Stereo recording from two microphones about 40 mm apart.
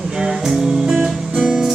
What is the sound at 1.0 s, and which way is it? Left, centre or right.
Music, right.